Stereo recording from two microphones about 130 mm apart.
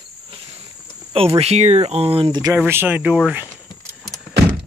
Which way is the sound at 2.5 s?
15° right (ahead or behind).